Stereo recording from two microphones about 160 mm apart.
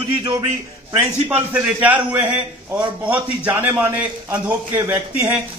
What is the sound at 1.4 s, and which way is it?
A man's voice, 10° right (ahead or behind).